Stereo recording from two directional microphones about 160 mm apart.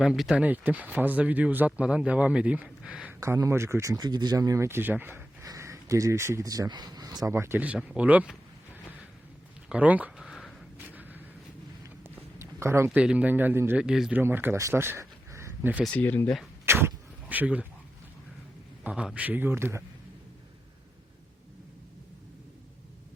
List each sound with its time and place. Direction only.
0.0 s speech: 5° right (ahead or behind)
3.2 s speech: 20° right (ahead or behind)
9.6 s a sound: 10° right (ahead or behind)
12.4 s speech: 15° right (ahead or behind)
15.8 s speech: 10° left (ahead or behind)
16.6 s a sound: 15° right (ahead or behind)
18.8 s speech: 5° right (ahead or behind)